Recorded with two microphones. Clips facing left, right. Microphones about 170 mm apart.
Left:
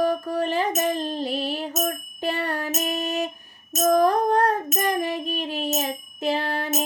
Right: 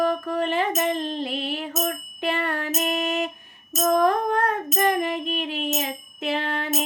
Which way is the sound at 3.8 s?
40° left (ahead or behind).